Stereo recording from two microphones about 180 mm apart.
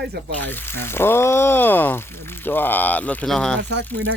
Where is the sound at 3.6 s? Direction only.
75° right (ahead or behind).